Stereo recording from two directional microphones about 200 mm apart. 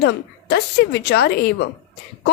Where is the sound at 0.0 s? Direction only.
55° left (ahead or behind).